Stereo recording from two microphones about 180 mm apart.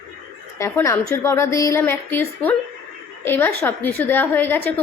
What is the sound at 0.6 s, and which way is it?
A woman's voice, 15° left (ahead or behind).